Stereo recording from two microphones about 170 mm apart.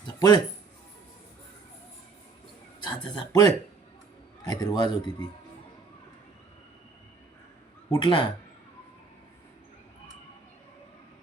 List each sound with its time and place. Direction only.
0.2 s speech: 25° left (ahead or behind)
2.8 s speech: 25° left (ahead or behind)
7.9 s speech: 30° left (ahead or behind)